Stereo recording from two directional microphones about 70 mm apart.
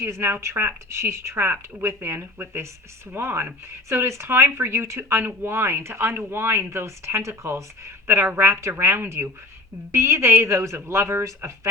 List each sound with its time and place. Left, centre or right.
0.0 s speech: right